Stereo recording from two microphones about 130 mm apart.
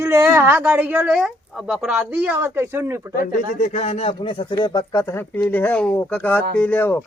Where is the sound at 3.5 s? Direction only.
60° left (ahead or behind).